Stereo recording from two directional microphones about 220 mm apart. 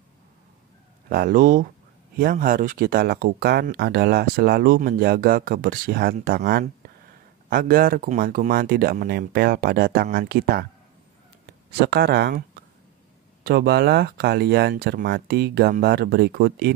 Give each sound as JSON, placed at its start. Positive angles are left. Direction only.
{"t": 1.0, "sound": "speech", "side_deg": -40}
{"t": 11.8, "sound": "speech", "side_deg": -45}